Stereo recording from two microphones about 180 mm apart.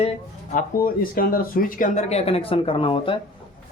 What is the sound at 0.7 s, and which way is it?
Speech, 55° left (ahead or behind).